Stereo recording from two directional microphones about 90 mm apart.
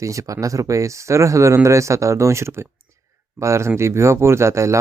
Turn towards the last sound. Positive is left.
turn(degrees=-30)  # may be behind; listen again after turning